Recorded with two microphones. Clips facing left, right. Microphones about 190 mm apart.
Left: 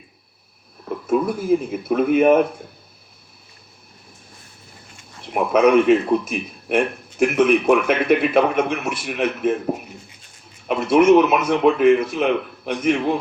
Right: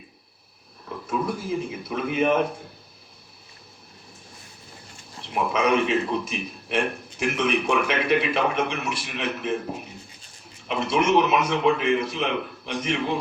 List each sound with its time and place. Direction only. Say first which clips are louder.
1.1 s a man's voice: left 8 dB; 55° left (ahead or behind)
5.3 s a man's voice: left 7 dB; 55° left (ahead or behind)
10.7 s a man's voice: left 8 dB; 50° left (ahead or behind)